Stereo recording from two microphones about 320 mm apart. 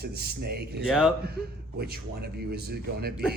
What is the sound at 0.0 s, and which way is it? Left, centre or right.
Speech, right.